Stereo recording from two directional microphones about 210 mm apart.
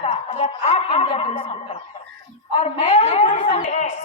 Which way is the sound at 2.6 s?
30° left (ahead or behind).